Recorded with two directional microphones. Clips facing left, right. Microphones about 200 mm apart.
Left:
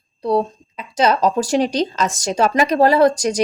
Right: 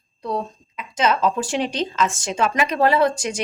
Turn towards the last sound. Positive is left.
turn(degrees=40)  # may be behind; listen again after turning